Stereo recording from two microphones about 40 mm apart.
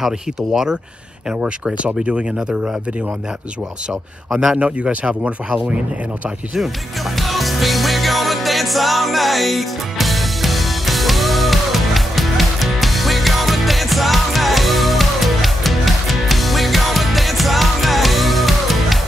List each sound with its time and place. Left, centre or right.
0.0 s speech: centre
4.3 s speech: centre
4.6 s speech: right
7.2 s music: centre